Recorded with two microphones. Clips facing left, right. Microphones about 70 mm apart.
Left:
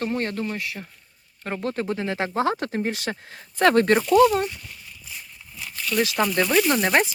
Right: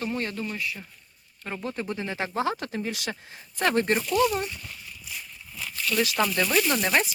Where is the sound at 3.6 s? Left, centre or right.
Left.